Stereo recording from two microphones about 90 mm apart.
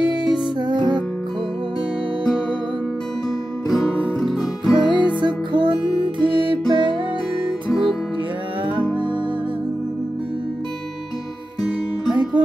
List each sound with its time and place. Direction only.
0.0 s music: 10° right (ahead or behind)
0.3 s music: 55° right (ahead or behind)
3.6 s music: centre (ahead or behind)
4.8 s music: 60° right (ahead or behind)